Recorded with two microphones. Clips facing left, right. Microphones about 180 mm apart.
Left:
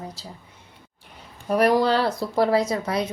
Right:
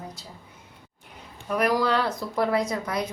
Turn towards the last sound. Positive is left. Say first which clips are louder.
# left 4 dB
turn(degrees=30)  # may be behind; listen again after turning